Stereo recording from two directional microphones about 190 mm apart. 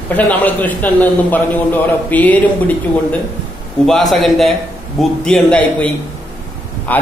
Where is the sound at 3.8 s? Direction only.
Centre (ahead or behind).